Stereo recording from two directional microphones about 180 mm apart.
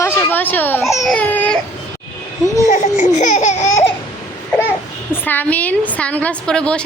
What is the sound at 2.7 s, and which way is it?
Speech, 45° left (ahead or behind).